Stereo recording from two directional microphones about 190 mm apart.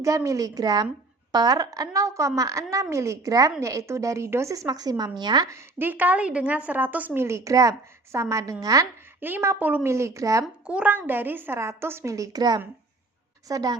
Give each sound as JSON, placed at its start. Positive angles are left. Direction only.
{"t": 0.0, "sound": "a woman's voice", "side_deg": -15}
{"t": 10.4, "sound": "a woman's voice", "side_deg": -5}